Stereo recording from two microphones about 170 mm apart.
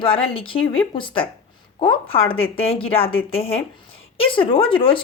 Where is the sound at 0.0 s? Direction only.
30° left (ahead or behind).